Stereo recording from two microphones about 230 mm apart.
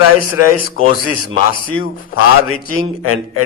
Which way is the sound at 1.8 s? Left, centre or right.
Left.